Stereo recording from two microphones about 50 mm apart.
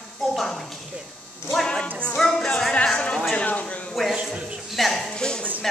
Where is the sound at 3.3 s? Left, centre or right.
Left.